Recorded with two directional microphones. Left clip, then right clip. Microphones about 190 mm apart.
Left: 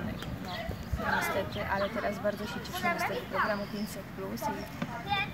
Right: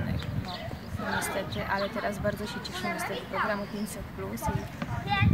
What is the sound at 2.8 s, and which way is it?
Speech, 35° left (ahead or behind).